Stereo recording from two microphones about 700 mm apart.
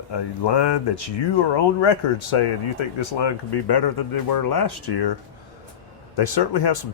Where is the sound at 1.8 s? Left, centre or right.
Left.